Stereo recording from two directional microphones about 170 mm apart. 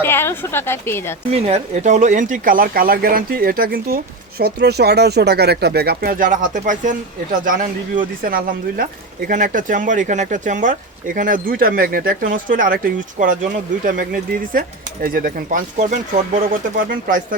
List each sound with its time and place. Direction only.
0.0 s a woman's voice: 15° left (ahead or behind)
1.3 s speech: 35° right (ahead or behind); by 17.2 s 55° right (ahead or behind)